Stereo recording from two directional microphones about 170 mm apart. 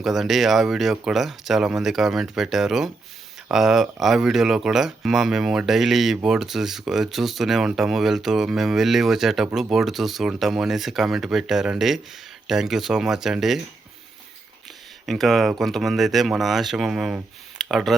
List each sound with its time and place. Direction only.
0.0 s speech: centre (ahead or behind)
15.0 s speech: centre (ahead or behind)